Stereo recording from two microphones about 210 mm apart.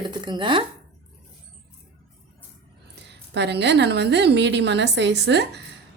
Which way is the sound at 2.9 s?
55° right (ahead or behind).